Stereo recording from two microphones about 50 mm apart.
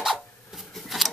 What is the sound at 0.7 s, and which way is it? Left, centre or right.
Scissors, centre.